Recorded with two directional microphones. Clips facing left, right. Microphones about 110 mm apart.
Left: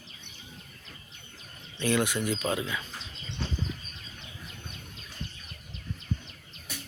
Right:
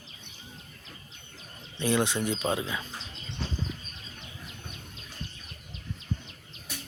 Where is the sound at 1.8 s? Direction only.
25° right (ahead or behind).